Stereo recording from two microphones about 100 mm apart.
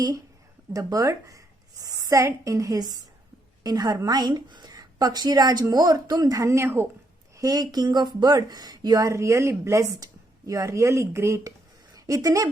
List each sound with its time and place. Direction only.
0.7 s a woman's voice: 35° right (ahead or behind)
7.3 s speech: 40° right (ahead or behind)
9.0 s a woman's voice: 30° right (ahead or behind)